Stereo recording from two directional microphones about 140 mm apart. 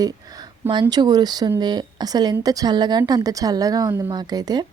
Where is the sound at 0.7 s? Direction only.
30° right (ahead or behind).